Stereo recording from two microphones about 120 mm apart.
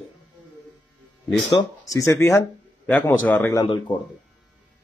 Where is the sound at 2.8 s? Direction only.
15° left (ahead or behind).